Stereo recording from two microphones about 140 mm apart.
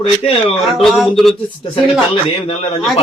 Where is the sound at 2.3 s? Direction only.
45° left (ahead or behind).